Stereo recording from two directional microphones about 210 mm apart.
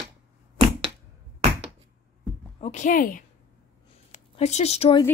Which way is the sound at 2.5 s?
30° left (ahead or behind).